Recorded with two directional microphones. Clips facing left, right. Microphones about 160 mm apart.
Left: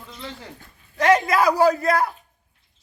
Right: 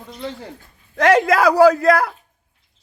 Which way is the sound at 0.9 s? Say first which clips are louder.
Right 3 dB; 75° right (ahead or behind).